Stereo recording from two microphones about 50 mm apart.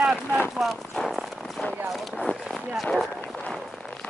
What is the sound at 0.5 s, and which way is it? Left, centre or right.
Speech, centre.